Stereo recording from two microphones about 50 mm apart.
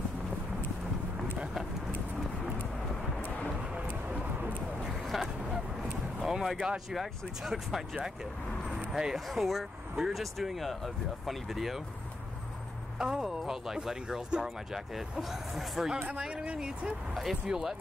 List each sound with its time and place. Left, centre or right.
3.7 s vehicle: right
5.0 s vehicle: centre
6.9 s speech: centre
13.0 s speech: centre
16.2 s speech: centre
17.1 s speech: centre